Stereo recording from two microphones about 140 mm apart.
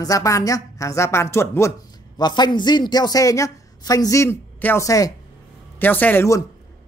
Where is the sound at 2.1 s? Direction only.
30° left (ahead or behind).